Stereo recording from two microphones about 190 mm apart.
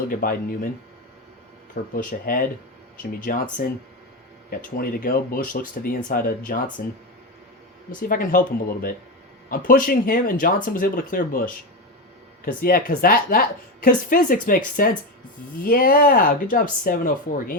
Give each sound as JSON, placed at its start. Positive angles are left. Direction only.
{"t": 0.1, "sound": "speech", "side_deg": 50}
{"t": 1.7, "sound": "speech", "side_deg": 45}
{"t": 4.8, "sound": "speech", "side_deg": 50}